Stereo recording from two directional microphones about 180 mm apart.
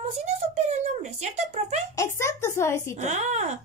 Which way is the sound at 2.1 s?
15° left (ahead or behind).